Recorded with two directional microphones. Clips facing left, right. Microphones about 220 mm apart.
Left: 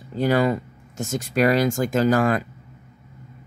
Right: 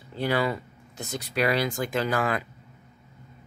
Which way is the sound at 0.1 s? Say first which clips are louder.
Left 6 dB; 45° left (ahead or behind).